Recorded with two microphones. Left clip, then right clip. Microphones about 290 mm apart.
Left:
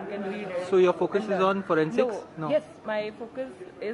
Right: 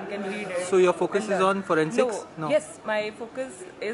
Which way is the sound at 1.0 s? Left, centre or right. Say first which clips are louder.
Right 1 dB; centre.